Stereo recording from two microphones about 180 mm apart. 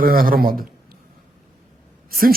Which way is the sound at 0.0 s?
55° right (ahead or behind).